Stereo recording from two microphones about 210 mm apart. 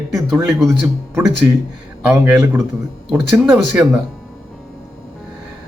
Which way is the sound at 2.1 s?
5° right (ahead or behind).